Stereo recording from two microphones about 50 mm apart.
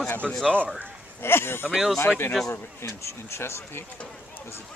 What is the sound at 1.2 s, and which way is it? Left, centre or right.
Speech, left.